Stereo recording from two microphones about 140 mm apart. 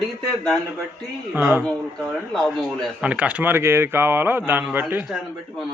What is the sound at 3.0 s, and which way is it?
Speech, 10° right (ahead or behind).